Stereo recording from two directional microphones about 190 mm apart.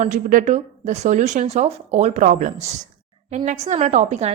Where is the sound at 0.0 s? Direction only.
40° right (ahead or behind).